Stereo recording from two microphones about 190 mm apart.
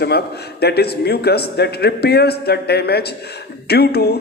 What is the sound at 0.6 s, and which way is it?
A man's voice, 55° left (ahead or behind).